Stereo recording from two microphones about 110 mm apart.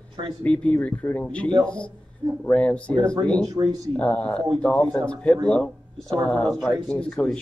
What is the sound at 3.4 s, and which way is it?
Speech, 35° right (ahead or behind).